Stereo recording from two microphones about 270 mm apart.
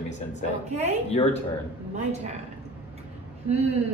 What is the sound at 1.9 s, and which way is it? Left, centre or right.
Speech, right.